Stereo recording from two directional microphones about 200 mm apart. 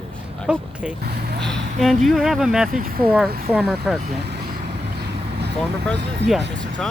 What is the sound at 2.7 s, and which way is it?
Speech, 45° right (ahead or behind).